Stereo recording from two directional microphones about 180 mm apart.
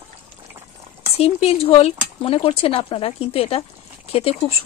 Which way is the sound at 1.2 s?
35° left (ahead or behind).